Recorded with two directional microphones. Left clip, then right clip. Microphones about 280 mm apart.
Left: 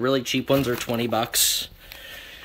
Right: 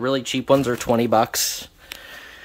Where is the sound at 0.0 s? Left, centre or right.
Centre.